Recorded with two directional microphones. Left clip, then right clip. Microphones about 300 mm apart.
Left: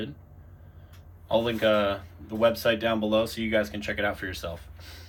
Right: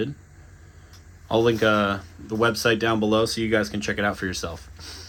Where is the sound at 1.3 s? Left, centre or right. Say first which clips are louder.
Right 4 dB; right.